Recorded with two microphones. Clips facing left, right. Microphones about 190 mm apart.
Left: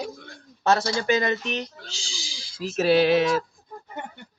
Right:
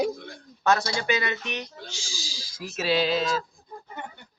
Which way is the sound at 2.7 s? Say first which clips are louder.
Left 6 dB; 55° left (ahead or behind).